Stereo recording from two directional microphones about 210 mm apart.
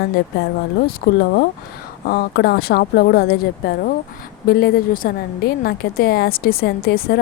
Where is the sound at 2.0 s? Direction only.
50° left (ahead or behind).